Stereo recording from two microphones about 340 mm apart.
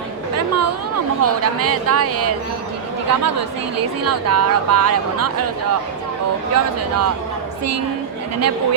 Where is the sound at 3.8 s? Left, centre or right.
Right.